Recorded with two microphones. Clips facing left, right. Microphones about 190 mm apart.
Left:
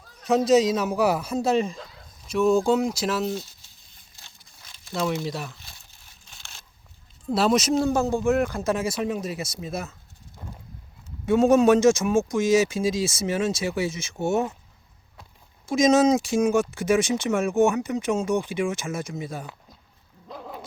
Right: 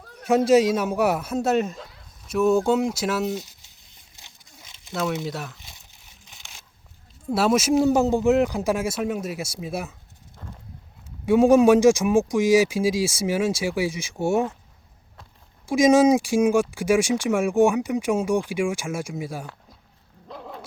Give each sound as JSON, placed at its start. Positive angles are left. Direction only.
{"t": 0.0, "sound": "a sound", "side_deg": -55}
{"t": 0.3, "sound": "speech", "side_deg": -10}
{"t": 3.3, "sound": "crumpling", "side_deg": -15}
{"t": 4.9, "sound": "speech", "side_deg": 0}
{"t": 5.5, "sound": "crumpling", "side_deg": -15}
{"t": 7.3, "sound": "speech", "side_deg": -5}
{"t": 11.3, "sound": "speech", "side_deg": -10}
{"t": 15.6, "sound": "speech", "side_deg": -10}
{"t": 20.2, "sound": "a sound", "side_deg": 5}